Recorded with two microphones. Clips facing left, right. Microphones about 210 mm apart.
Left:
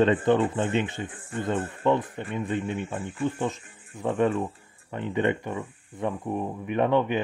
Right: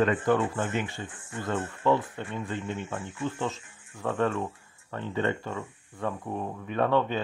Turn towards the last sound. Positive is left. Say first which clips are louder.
# left 2 dB
turn(degrees=15)  # may be behind; listen again after turning